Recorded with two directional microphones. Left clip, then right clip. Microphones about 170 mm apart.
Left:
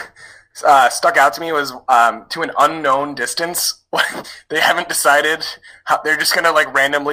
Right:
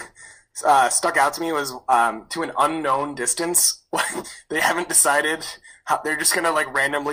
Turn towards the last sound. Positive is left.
turn(degrees=35)  # may be behind; listen again after turning